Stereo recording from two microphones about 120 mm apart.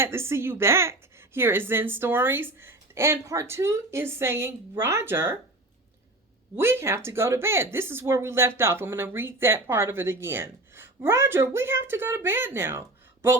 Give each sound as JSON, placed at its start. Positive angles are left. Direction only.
{"t": 0.0, "sound": "speech", "side_deg": -20}
{"t": 6.6, "sound": "speech", "side_deg": -20}